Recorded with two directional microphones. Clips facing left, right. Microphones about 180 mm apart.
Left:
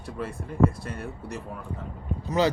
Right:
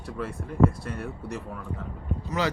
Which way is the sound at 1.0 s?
15° left (ahead or behind).